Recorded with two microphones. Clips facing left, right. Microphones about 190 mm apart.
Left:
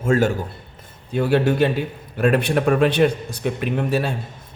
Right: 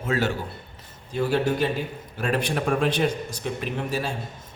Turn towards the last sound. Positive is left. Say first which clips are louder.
# left 6 dB
turn(degrees=60)  # may be behind; listen again after turning